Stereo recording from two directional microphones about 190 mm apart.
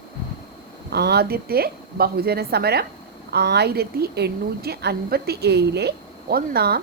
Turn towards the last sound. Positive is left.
turn(degrees=-55)  # may be behind; listen again after turning